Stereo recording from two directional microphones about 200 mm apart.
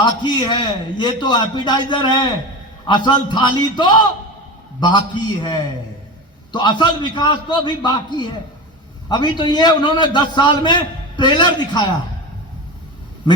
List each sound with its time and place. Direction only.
0.0 s a man's voice: 20° left (ahead or behind)